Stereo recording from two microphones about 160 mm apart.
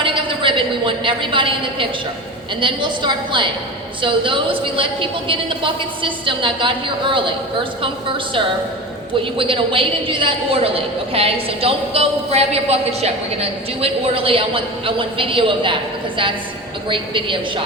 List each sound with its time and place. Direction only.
0.0 s a woman's voice: 30° right (ahead or behind)
9.4 s a woman's voice: 35° right (ahead or behind)